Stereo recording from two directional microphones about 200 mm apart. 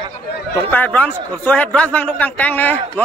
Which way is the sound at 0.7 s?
10° left (ahead or behind).